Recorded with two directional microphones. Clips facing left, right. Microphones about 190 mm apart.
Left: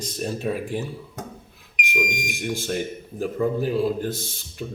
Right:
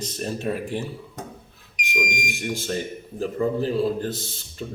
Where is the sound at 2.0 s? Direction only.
15° right (ahead or behind).